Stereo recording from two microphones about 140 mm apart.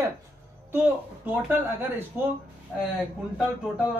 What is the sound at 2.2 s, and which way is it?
Speech, 15° right (ahead or behind).